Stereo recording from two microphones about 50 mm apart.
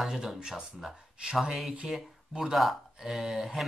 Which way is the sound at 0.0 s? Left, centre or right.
Centre.